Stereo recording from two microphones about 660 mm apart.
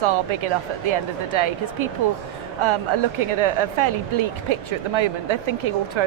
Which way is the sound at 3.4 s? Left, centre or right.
Right.